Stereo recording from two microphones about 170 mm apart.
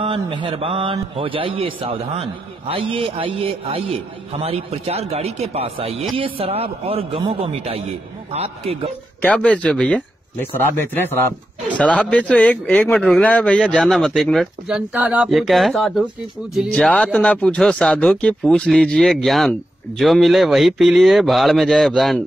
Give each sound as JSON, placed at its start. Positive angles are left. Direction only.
{"t": 0.0, "sound": "a man's voice", "side_deg": -30}
{"t": 9.2, "sound": "speech", "side_deg": 5}
{"t": 11.7, "sound": "a man's voice", "side_deg": 10}